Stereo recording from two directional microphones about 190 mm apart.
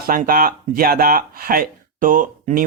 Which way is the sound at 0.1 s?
50° right (ahead or behind).